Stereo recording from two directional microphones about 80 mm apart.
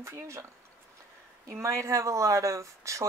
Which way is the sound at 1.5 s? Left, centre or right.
Right.